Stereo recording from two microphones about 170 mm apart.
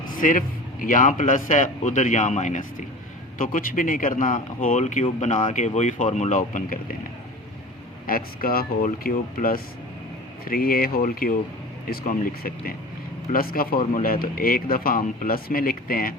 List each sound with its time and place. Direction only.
0.0 s a man's voice: 55° left (ahead or behind)
8.0 s speech: 60° left (ahead or behind)